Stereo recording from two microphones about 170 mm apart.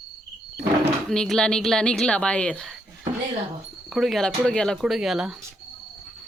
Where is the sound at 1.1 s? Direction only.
5° left (ahead or behind).